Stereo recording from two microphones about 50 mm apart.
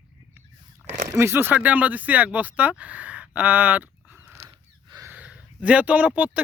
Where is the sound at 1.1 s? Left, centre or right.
Right.